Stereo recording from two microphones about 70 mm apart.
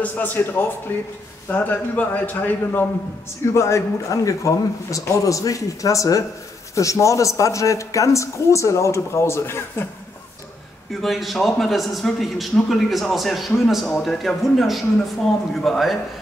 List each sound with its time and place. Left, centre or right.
0.0 s a man's voice: left
3.5 s speech: left
10.9 s a man's voice: centre